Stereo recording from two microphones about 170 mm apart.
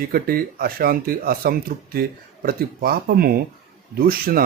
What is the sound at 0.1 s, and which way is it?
Speech, 60° right (ahead or behind).